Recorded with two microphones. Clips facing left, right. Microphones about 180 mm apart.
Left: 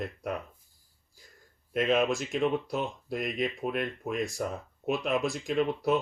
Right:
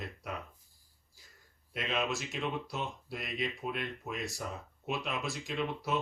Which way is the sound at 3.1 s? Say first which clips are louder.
Left 8 dB; 50° left (ahead or behind).